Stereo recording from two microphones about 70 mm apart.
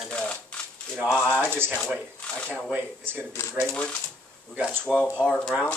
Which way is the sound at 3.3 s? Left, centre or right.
Left.